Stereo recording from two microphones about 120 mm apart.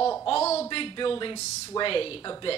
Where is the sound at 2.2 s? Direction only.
35° left (ahead or behind).